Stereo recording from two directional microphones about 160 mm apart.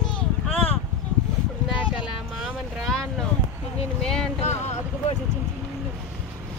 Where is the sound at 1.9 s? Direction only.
5° right (ahead or behind).